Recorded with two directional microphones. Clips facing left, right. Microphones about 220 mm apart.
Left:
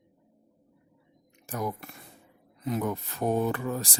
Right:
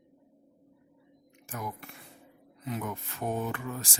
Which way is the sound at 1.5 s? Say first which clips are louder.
Left 6 dB; 35° left (ahead or behind).